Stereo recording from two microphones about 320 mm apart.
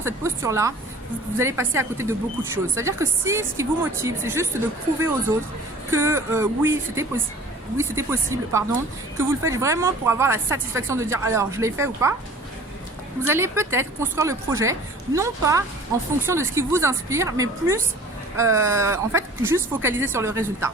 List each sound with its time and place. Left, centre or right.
0.0 s speech: centre
13.2 s speech: centre